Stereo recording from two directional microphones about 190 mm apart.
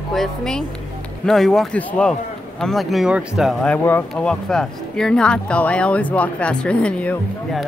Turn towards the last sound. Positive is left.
turn(degrees=5)  # may be behind; listen again after turning